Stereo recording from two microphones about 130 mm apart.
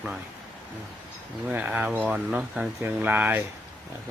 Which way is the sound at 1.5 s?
10° right (ahead or behind).